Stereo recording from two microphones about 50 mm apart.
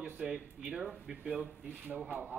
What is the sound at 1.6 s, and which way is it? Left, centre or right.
Speech, right.